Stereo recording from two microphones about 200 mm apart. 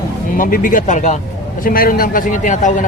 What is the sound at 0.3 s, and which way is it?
A man's voice, 45° left (ahead or behind).